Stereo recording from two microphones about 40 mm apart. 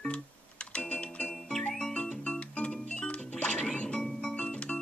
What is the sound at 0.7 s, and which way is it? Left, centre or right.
Music, left.